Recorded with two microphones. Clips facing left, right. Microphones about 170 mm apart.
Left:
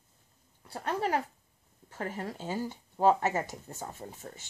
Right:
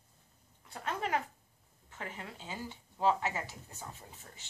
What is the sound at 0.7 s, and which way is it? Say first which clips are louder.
A woman's voice: left 5 dB; 35° left (ahead or behind).